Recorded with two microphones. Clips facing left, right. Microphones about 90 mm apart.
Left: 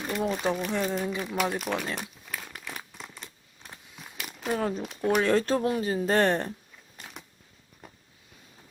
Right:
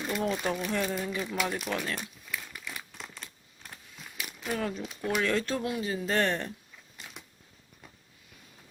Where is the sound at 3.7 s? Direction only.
20° left (ahead or behind).